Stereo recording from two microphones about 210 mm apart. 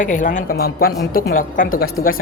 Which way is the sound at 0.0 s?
40° left (ahead or behind).